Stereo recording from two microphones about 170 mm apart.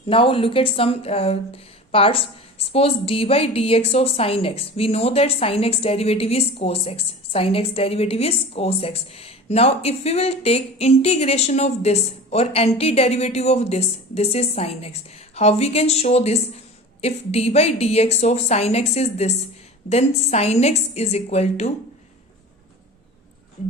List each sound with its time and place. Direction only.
0.1 s a woman's voice: 30° left (ahead or behind)